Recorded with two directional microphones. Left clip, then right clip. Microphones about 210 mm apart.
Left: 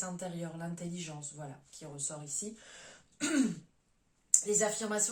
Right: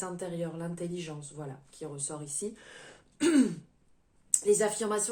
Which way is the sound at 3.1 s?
50° right (ahead or behind).